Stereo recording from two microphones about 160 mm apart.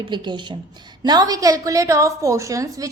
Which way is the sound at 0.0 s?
30° right (ahead or behind).